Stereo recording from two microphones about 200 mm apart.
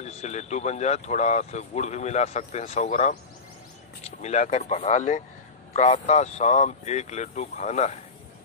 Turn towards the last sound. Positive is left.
turn(degrees=35)  # may be behind; listen again after turning